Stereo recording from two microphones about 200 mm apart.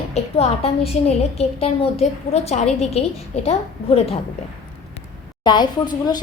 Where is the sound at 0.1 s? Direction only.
30° left (ahead or behind).